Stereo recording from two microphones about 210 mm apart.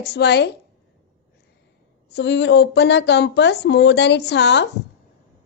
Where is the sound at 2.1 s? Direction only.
55° left (ahead or behind).